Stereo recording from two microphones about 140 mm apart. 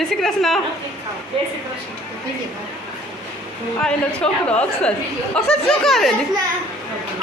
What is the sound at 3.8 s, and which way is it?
A woman's voice, 5° left (ahead or behind).